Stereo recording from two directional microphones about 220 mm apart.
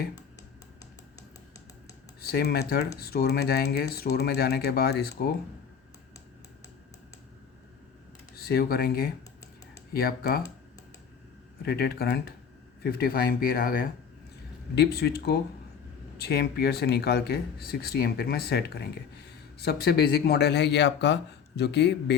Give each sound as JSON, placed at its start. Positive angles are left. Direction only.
{"t": 2.2, "sound": "speech", "side_deg": 45}
{"t": 8.4, "sound": "speech", "side_deg": 45}
{"t": 11.6, "sound": "speech", "side_deg": 45}